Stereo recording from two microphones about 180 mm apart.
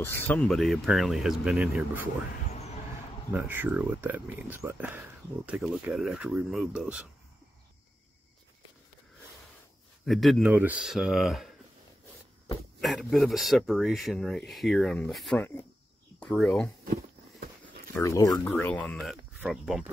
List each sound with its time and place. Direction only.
0.0 s speech: 10° left (ahead or behind)
3.3 s speech: 10° right (ahead or behind)
10.0 s speech: centre (ahead or behind)
10.4 s speech: 10° right (ahead or behind)
12.8 s speech: centre (ahead or behind)
16.8 s a sound: 60° right (ahead or behind)
17.9 s speech: 20° left (ahead or behind)
18.5 s speech: 10° left (ahead or behind)